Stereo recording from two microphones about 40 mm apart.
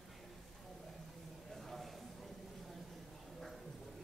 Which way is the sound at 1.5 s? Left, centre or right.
Centre.